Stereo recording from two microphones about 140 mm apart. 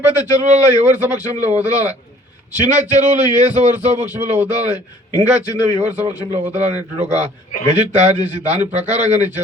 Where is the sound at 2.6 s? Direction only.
55° right (ahead or behind).